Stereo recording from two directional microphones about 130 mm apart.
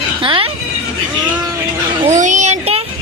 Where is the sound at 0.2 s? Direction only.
45° right (ahead or behind).